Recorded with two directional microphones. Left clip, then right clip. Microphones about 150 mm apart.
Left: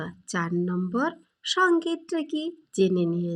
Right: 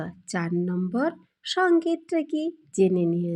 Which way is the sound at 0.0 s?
15° right (ahead or behind).